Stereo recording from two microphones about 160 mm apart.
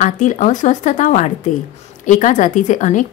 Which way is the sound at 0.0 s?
50° left (ahead or behind).